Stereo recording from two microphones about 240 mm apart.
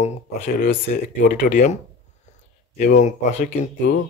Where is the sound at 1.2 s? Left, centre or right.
Left.